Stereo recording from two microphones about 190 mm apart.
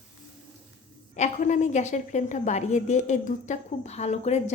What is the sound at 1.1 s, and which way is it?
A woman's voice, 40° left (ahead or behind).